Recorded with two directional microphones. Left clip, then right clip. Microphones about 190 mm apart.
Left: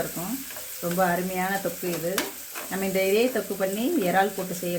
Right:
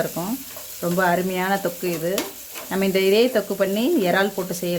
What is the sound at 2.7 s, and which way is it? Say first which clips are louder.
Sizzle: right 5 dB; 55° right (ahead or behind).